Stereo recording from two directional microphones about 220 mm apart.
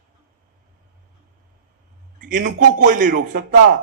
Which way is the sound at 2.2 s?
35° right (ahead or behind).